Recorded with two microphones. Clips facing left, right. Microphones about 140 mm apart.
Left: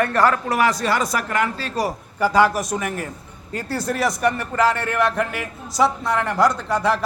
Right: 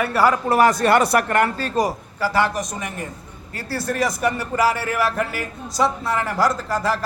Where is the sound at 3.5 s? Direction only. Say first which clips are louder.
Left 1 dB; 20° left (ahead or behind).